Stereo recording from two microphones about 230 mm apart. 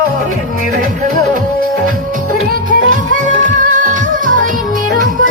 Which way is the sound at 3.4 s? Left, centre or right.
Right.